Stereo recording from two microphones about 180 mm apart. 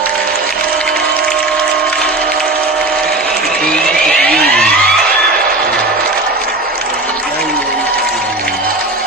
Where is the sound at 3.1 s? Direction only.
5° left (ahead or behind).